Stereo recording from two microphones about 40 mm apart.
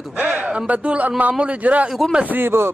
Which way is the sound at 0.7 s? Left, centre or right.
Right.